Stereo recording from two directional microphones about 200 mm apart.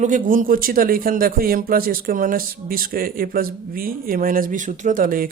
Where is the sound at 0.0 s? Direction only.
40° right (ahead or behind).